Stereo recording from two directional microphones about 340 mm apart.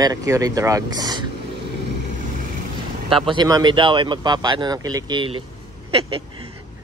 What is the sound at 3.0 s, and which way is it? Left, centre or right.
Speech, centre.